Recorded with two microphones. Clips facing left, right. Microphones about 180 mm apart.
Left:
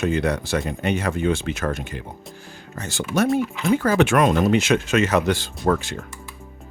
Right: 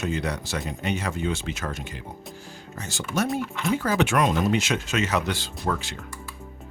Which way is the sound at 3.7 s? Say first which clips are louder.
Left 5 dB; 55° left (ahead or behind).